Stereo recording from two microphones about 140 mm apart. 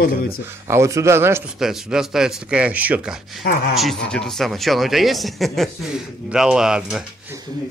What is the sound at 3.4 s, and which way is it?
Speech, 90° left.